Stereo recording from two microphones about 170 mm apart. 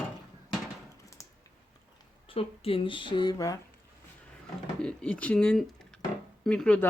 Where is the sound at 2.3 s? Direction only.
35° left (ahead or behind).